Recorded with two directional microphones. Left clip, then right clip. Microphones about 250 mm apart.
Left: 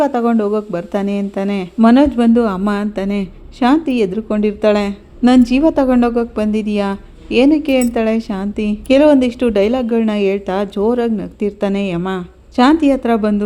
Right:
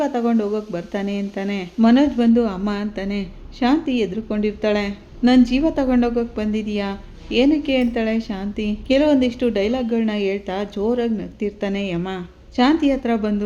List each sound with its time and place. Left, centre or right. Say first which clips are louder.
0.0 s a woman's voice: left 6 dB; centre